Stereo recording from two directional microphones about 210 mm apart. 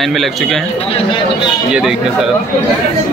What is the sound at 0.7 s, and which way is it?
Speech, 25° left (ahead or behind).